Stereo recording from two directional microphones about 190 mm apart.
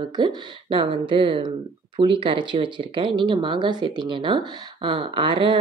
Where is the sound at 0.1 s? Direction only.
25° right (ahead or behind).